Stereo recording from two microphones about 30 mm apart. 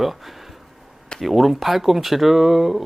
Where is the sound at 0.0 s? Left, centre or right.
Centre.